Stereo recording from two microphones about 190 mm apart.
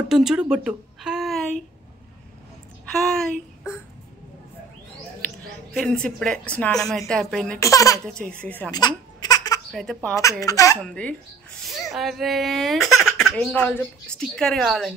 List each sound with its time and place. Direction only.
0.1 s speech: centre (ahead or behind)
2.9 s speech: centre (ahead or behind)
5.2 s speech: 5° left (ahead or behind)
7.7 s speech: 15° left (ahead or behind)
8.7 s baby laughter: 20° left (ahead or behind)
9.7 s speech: centre (ahead or behind)
10.4 s speech: 15° left (ahead or behind)
10.8 s speech: 5° left (ahead or behind)